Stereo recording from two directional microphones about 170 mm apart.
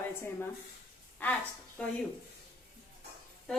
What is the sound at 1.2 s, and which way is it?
Speech, 10° left (ahead or behind).